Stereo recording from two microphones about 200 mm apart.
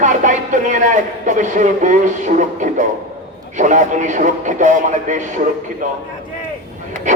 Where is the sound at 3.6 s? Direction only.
40° right (ahead or behind).